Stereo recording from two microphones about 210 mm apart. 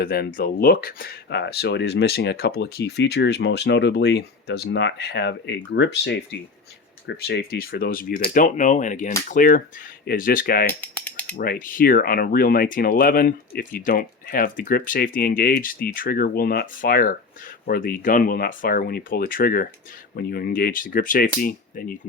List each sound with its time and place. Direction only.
0.0 s speech: 45° left (ahead or behind)
10.8 s mechanisms: 5° left (ahead or behind)
11.3 s speech: 45° left (ahead or behind)